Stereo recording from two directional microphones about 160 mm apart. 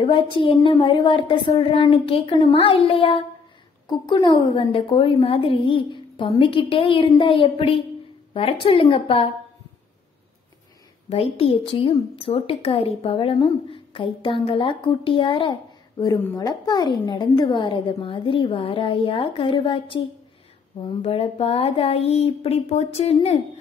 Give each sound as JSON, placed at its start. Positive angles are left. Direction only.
{"t": 0.0, "sound": "speech", "side_deg": 30}
{"t": 11.1, "sound": "speech", "side_deg": 35}